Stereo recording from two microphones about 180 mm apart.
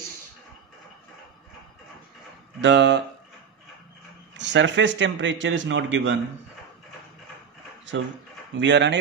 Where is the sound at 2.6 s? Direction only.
80° right.